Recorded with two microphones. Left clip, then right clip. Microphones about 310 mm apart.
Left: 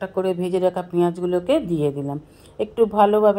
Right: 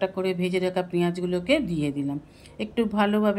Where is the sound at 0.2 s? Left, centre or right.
Centre.